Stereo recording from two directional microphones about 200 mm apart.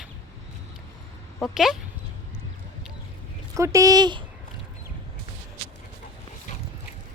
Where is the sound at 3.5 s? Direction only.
15° right (ahead or behind).